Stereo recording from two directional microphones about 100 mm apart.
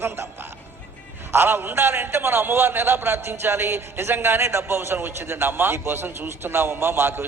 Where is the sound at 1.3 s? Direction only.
25° right (ahead or behind).